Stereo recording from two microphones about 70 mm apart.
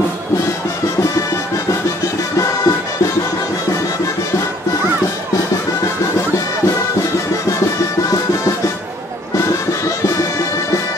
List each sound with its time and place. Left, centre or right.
2.3 s music: left
9.5 s music: left